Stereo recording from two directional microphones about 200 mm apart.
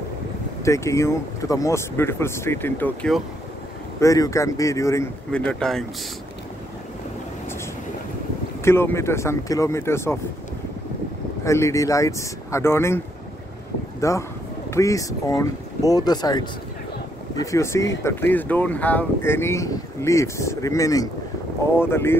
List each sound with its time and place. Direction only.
0.7 s speech: 15° left (ahead or behind)
8.6 s speech: 10° left (ahead or behind)
11.4 s speech: 15° left (ahead or behind)
14.0 s speech: 15° left (ahead or behind)